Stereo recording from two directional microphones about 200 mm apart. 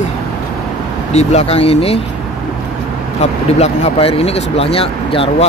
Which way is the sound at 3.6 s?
30° left (ahead or behind).